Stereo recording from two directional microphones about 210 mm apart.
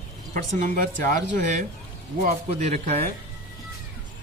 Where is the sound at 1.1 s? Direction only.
35° right (ahead or behind).